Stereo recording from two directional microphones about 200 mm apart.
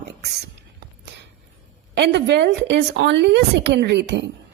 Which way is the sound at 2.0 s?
60° right (ahead or behind).